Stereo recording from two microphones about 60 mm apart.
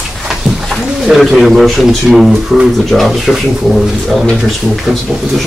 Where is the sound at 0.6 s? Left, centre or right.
Centre.